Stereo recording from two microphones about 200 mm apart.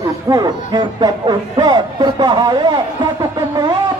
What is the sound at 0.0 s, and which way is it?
Speech, 20° right (ahead or behind).